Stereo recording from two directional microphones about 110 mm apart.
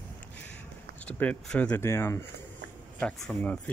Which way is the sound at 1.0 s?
10° left (ahead or behind).